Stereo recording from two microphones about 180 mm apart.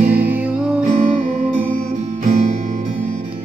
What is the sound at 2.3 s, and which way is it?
Music, 40° right (ahead or behind).